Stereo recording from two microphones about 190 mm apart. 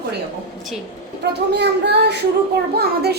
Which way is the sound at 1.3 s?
65° right (ahead or behind).